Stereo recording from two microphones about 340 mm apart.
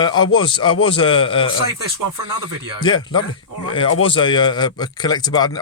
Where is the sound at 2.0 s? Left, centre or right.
Right.